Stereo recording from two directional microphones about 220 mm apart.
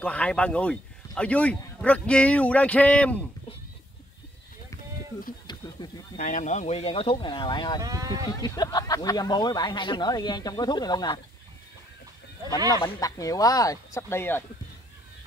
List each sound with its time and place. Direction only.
0.0 s speech: 5° left (ahead or behind)
5.5 s a sound: 20° left (ahead or behind)
6.1 s speech: 35° left (ahead or behind); by 7.8 s 20° left (ahead or behind)
7.8 s speech: 15° right (ahead or behind)
8.3 s speech: 15° left (ahead or behind)
12.7 s speech: 15° left (ahead or behind)